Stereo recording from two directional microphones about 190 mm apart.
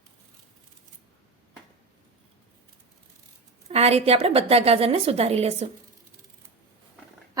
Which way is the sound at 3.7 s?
30° right (ahead or behind).